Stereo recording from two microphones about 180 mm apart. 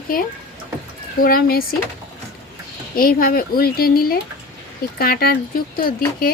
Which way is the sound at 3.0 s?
55° left (ahead or behind).